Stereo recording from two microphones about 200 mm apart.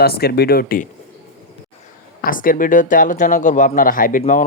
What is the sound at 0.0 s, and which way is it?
Speech, 50° left (ahead or behind).